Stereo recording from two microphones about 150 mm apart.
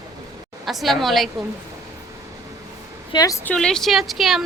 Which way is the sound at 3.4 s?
5° left (ahead or behind).